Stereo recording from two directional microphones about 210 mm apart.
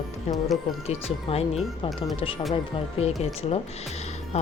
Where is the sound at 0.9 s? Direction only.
30° left (ahead or behind).